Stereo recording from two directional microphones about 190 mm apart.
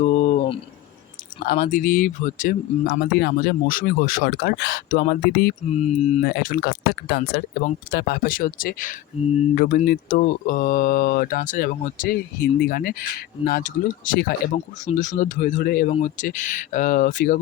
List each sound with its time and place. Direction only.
0.0 s a sound: 40° left (ahead or behind)
1.5 s speech: 50° left (ahead or behind)
2.8 s speech: 60° left (ahead or behind)
5.7 s speech: 35° left (ahead or behind)
6.2 s speech: 55° left (ahead or behind)
14.5 s speech: 40° left (ahead or behind)
15.9 s speech: 35° left (ahead or behind)